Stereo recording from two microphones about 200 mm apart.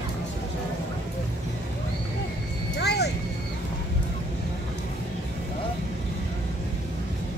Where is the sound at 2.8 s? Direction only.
55° left (ahead or behind).